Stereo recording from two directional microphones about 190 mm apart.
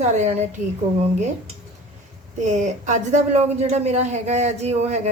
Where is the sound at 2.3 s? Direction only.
40° right (ahead or behind).